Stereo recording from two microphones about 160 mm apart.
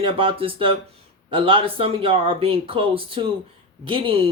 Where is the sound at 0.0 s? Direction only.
35° right (ahead or behind).